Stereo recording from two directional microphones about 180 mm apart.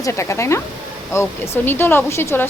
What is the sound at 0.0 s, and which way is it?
Speech, 15° left (ahead or behind).